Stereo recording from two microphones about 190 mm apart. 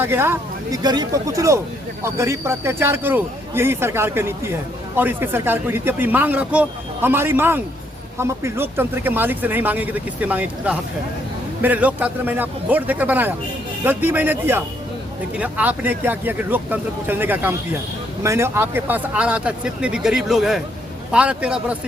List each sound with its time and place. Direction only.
0.0 s a man's voice: 10° right (ahead or behind)